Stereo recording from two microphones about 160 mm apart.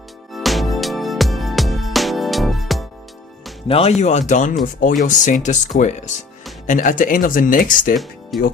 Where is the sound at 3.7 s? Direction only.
40° left (ahead or behind).